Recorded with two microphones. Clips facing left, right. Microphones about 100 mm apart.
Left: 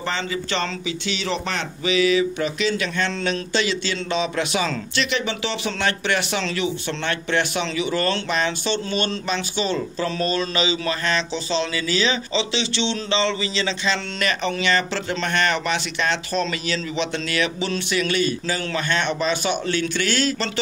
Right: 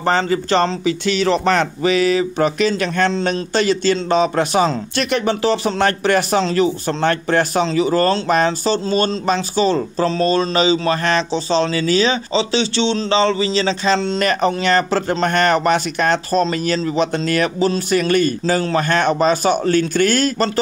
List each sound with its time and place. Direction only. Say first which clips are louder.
0.0 s a man's voice: right 9 dB; 45° right (ahead or behind)